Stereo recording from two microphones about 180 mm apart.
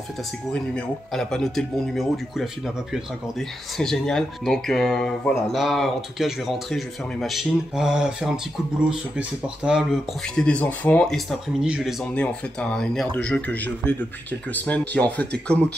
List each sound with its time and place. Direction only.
0.5 s speech: 5° left (ahead or behind)
9.6 s speech: 5° right (ahead or behind)
10.3 s speech: 5° left (ahead or behind)